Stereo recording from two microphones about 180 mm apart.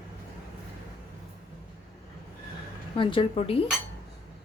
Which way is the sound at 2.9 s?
30° left (ahead or behind).